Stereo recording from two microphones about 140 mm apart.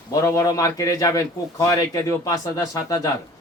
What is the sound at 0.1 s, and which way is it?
A man's voice, 25° left (ahead or behind).